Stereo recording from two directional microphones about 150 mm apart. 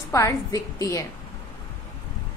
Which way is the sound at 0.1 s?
20° left (ahead or behind).